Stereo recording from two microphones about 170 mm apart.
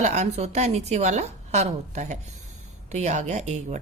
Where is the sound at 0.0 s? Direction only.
40° right (ahead or behind).